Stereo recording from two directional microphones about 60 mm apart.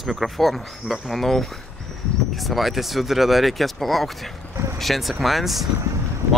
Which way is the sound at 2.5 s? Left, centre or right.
Centre.